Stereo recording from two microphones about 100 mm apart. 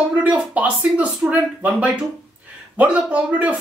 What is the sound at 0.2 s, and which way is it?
Speech, 15° right (ahead or behind).